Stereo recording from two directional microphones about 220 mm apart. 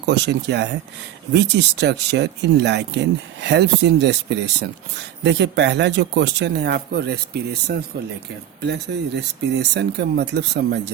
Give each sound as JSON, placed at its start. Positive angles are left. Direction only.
{"t": 0.0, "sound": "speech", "side_deg": -50}